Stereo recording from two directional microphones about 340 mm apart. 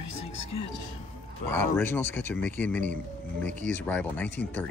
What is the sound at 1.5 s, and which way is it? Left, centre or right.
Speech, centre.